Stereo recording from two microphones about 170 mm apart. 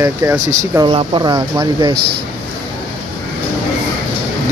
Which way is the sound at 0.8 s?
30° right (ahead or behind).